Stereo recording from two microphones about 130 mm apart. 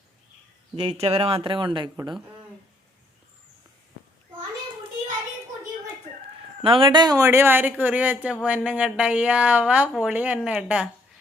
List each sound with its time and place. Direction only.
0.9 s speech: 50° right (ahead or behind)
6.6 s speech: 40° right (ahead or behind); by 10.8 s 5° right (ahead or behind)